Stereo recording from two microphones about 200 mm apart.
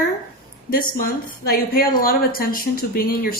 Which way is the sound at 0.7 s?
45° left (ahead or behind).